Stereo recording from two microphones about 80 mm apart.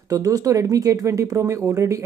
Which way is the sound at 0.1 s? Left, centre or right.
Right.